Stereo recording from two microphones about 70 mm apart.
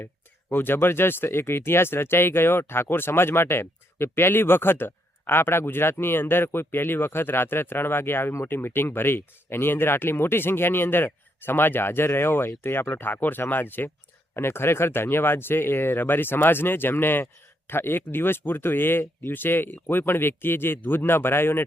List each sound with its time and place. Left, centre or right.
0.5 s speech: left